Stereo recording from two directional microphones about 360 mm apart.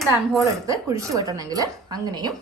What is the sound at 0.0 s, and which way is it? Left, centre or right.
A woman's voice, centre.